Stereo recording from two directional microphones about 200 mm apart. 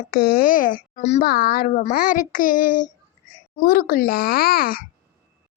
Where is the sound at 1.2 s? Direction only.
50° left (ahead or behind).